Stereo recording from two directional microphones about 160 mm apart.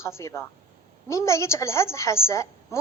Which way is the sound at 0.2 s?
15° left (ahead or behind).